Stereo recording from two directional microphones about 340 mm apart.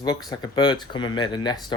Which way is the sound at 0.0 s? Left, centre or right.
Centre.